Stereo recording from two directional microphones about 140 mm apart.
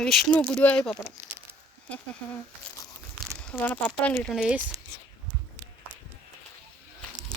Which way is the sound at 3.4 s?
10° left (ahead or behind).